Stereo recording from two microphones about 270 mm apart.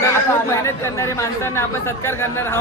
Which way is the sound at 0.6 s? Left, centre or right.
Centre.